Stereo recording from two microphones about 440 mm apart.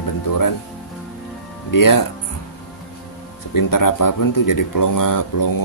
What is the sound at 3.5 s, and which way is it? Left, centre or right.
Speech, left.